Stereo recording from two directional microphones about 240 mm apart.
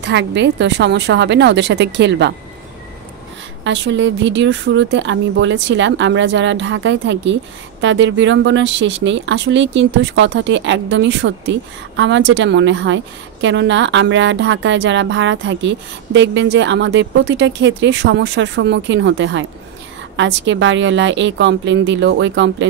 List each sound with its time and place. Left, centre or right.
0.0 s a woman's voice: right
3.6 s a woman's voice: right